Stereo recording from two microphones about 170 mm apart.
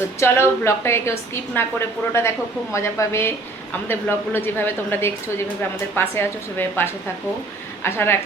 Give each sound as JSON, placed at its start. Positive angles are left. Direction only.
{"t": 0.2, "sound": "a woman's voice", "side_deg": 15}